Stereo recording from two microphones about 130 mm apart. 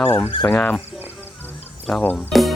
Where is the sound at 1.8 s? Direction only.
5° left (ahead or behind).